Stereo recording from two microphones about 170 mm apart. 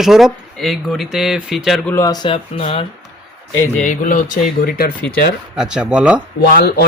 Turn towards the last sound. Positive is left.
turn(degrees=70)  # may be behind; listen again after turning